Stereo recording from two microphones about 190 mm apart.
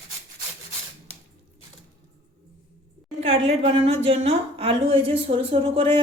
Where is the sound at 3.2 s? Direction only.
30° right (ahead or behind).